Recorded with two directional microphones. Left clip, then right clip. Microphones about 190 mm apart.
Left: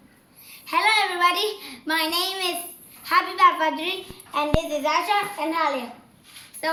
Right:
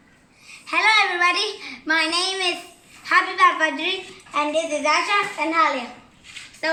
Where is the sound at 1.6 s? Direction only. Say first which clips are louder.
Right 4 dB; 10° left (ahead or behind).